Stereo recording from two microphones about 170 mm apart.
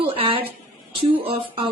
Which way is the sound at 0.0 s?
30° right (ahead or behind).